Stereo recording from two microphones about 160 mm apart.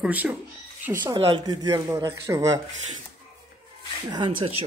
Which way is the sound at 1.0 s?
30° right (ahead or behind).